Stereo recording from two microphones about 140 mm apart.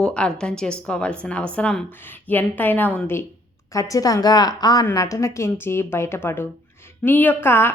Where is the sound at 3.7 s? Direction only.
25° left (ahead or behind).